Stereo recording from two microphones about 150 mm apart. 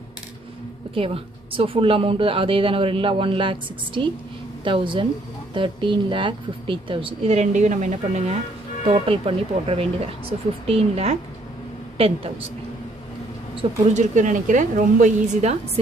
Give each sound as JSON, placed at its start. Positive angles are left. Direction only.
{"t": 0.9, "sound": "a woman's voice", "side_deg": -40}
{"t": 7.3, "sound": "a woman's voice", "side_deg": -55}
{"t": 8.8, "sound": "a woman's voice", "side_deg": -40}
{"t": 13.6, "sound": "speech", "side_deg": -50}